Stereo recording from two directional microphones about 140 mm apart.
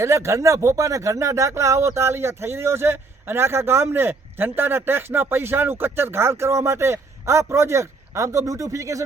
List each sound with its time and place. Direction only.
0.0 s speech: 20° right (ahead or behind)